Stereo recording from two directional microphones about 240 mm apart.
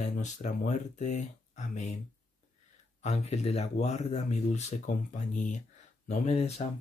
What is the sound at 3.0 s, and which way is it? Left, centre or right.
Speech, left.